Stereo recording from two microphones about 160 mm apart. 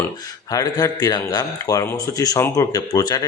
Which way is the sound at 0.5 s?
25° left (ahead or behind).